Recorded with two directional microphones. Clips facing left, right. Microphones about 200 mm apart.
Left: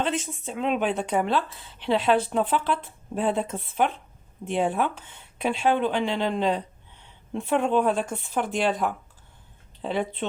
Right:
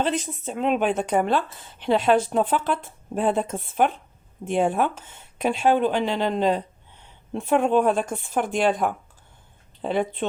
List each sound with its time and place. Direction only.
0.0 s a woman's voice: 40° right (ahead or behind)